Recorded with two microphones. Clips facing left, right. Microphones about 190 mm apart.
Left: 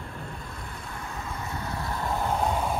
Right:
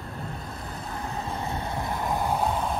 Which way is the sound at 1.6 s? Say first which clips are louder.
Left 1 dB; 20° right (ahead or behind).